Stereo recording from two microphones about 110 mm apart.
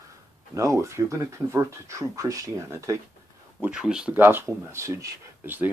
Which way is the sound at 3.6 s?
5° right (ahead or behind).